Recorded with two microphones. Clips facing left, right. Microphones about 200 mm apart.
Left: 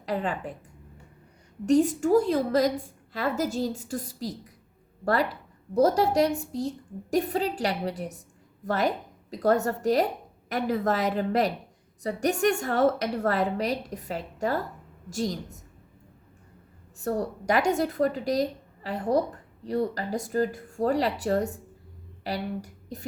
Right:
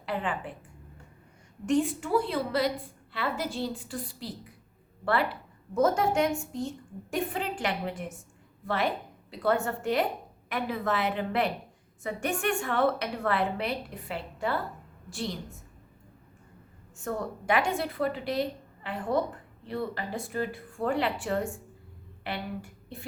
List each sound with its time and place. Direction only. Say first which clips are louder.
0.0 s a woman's voice: left 3 dB; 40° left (ahead or behind)
1.6 s a woman's voice: left 5 dB; 40° left (ahead or behind)
17.0 s a woman's voice: left 5 dB; 35° left (ahead or behind)